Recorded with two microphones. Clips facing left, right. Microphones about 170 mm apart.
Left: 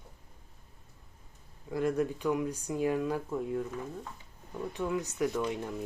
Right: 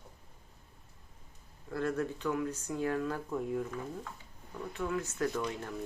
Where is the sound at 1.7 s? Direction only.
15° left (ahead or behind).